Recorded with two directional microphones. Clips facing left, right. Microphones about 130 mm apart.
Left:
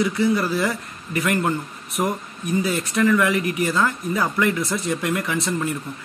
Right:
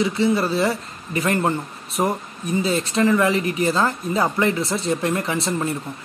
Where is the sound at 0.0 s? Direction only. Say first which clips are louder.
Right 1 dB; 25° right (ahead or behind).